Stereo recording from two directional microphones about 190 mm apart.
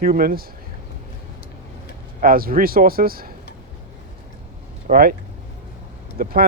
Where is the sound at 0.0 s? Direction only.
50° right (ahead or behind).